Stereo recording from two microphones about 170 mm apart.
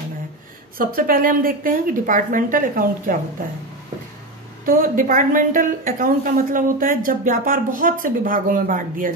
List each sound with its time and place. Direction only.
0.7 s a woman's voice: 60° right (ahead or behind)
4.6 s a woman's voice: 55° right (ahead or behind)